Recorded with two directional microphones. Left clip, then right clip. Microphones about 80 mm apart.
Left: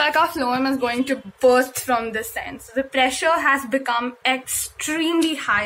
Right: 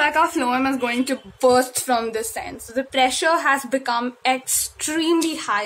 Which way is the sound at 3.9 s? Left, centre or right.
Right.